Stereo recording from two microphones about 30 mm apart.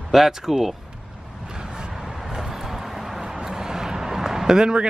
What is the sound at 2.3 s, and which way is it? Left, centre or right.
Vehicle, centre.